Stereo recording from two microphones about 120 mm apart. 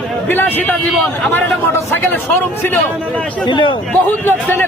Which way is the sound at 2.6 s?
20° left (ahead or behind).